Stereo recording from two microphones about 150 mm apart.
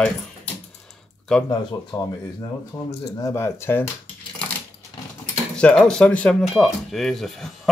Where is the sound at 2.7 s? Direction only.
10° left (ahead or behind).